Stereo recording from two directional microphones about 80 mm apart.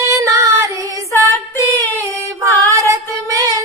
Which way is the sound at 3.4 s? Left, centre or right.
Right.